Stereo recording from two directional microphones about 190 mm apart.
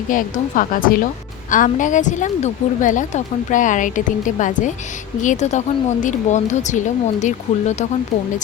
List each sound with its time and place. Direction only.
0.1 s a woman's voice: 45° left (ahead or behind)